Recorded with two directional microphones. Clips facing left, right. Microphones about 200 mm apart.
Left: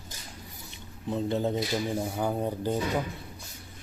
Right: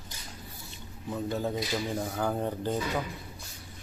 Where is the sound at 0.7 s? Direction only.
20° left (ahead or behind).